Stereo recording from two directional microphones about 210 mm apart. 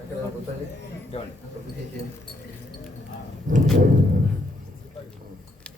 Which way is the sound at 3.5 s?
35° right (ahead or behind).